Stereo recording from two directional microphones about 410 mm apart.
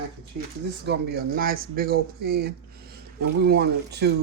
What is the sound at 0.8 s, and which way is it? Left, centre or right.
Speech, right.